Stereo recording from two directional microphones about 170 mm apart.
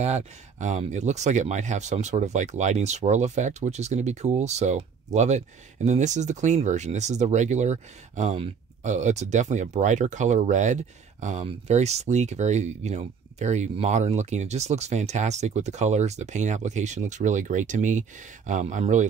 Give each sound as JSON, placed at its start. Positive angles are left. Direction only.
{"t": 0.0, "sound": "speech", "side_deg": -45}